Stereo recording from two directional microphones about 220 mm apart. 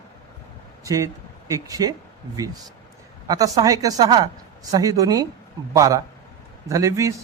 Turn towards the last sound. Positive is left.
turn(degrees=-15)  # may be behind; listen again after turning